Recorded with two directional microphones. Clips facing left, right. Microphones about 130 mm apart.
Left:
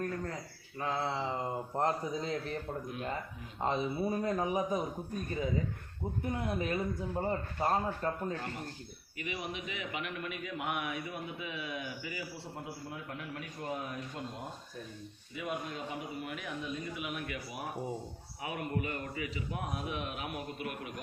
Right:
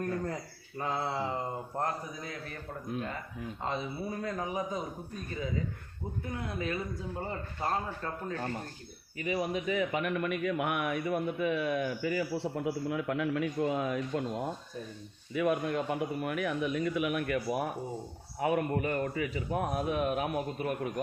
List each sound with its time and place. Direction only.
0.8 s a sound: 5° right (ahead or behind)
1.7 s a man's voice: 25° left (ahead or behind)
3.6 s a man's voice: 20° left (ahead or behind)
6.4 s a man's voice: 20° left (ahead or behind)
9.1 s speech: 40° right (ahead or behind); by 14.3 s 90° right
15.4 s a man's voice: 65° right (ahead or behind); by 20.9 s 40° right (ahead or behind)